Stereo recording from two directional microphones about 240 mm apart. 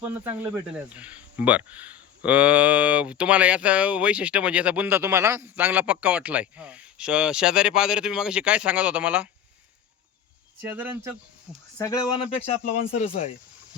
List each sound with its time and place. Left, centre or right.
0.0 s speech: centre
10.6 s speech: centre
11.8 s speech: centre
13.0 s speech: left